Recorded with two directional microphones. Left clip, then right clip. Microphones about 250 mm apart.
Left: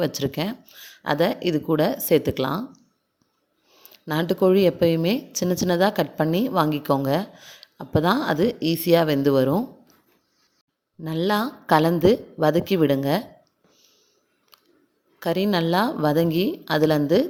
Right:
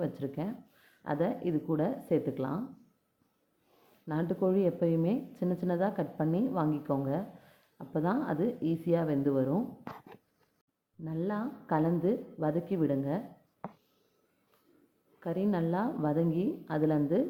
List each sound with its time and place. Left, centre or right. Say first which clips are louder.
0.2 s a woman's voice: left 11 dB; left
4.0 s a woman's voice: left 11 dB; left
11.0 s a woman's voice: left 13 dB; left
15.2 s a woman's voice: left 10 dB; left